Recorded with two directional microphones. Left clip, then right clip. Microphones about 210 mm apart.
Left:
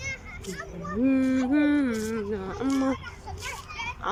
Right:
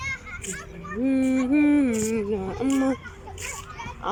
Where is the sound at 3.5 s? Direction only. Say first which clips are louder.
Left 4 dB; centre (ahead or behind).